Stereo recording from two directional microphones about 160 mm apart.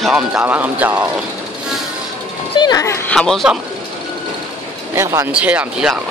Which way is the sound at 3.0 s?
5° left (ahead or behind).